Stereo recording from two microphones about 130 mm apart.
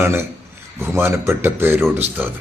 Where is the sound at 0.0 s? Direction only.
20° right (ahead or behind).